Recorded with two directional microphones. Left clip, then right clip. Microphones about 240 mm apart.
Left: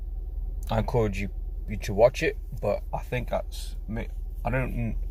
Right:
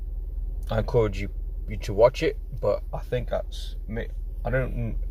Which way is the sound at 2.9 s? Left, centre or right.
Centre.